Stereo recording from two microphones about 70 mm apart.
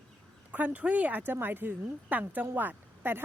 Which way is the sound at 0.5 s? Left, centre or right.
Right.